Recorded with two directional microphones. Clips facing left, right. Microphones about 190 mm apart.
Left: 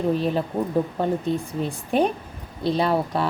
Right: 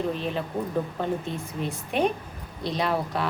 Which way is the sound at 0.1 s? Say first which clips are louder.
Left 6 dB; 40° left (ahead or behind).